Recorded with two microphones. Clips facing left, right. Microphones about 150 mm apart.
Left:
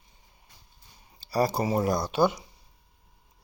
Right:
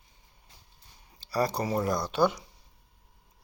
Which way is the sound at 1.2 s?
5° left (ahead or behind).